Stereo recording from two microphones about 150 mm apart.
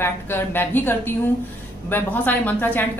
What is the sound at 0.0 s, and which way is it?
A woman's voice, 15° left (ahead or behind).